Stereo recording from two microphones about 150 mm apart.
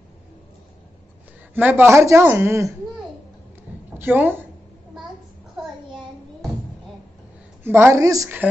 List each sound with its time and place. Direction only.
1.5 s speech: 15° right (ahead or behind)
4.0 s speech: 15° right (ahead or behind)
7.6 s a woman's voice: 15° right (ahead or behind)